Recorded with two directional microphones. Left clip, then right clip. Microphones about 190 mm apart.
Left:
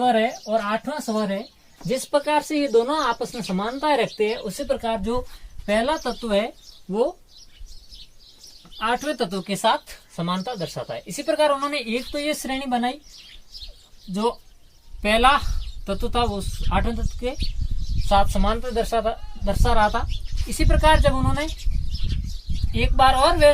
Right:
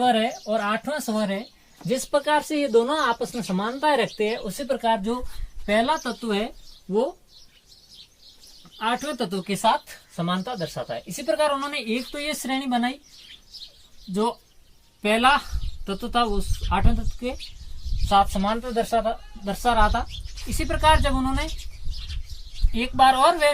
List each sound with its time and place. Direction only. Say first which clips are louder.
0.0 s speech: left 1 dB; 10° left (ahead or behind)
2.0 s a woman's voice: left 1 dB; 25° left (ahead or behind)
8.8 s a woman's voice: left 2 dB; 25° left (ahead or behind)
11.1 s a woman's voice: left 3 dB; 30° left (ahead or behind)
14.1 s a woman's voice: left 1 dB; 25° left (ahead or behind)
22.7 s a woman's voice: even; 25° left (ahead or behind)